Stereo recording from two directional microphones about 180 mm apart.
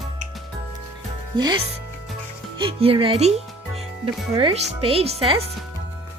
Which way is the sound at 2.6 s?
30° right (ahead or behind).